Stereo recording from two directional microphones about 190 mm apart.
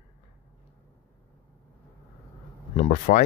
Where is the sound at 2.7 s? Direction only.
40° left (ahead or behind).